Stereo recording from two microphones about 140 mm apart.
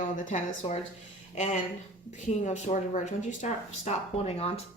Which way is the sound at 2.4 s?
60° left (ahead or behind).